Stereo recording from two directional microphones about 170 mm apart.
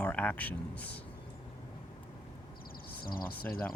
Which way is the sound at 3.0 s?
60° left (ahead or behind).